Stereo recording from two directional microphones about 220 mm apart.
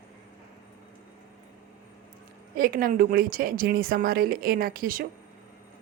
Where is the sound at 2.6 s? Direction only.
40° right (ahead or behind).